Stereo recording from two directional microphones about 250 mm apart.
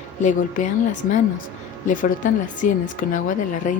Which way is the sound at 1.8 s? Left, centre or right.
Left.